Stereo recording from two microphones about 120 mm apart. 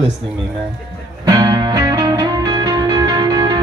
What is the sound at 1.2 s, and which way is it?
Music, 35° right (ahead or behind).